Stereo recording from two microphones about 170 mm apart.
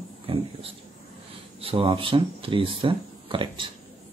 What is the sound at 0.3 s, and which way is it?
Speech, 35° right (ahead or behind).